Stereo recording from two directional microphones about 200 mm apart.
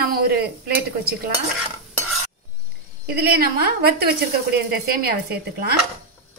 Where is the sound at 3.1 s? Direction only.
50° right (ahead or behind).